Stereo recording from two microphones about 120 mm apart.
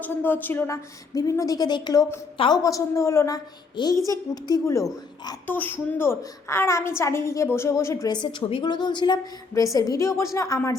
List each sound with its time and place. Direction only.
0.0 s speech: 15° left (ahead or behind)
1.1 s a woman's voice: 30° left (ahead or behind)
5.5 s a woman's voice: 15° left (ahead or behind)
8.1 s a woman's voice: 40° left (ahead or behind)